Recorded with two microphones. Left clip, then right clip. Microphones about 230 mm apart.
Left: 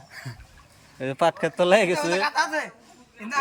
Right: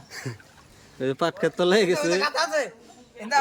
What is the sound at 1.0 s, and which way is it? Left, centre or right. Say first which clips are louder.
Speech: left 2 dB; centre.